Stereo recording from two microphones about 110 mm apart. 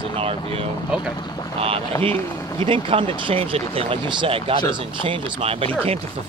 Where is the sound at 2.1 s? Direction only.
25° left (ahead or behind).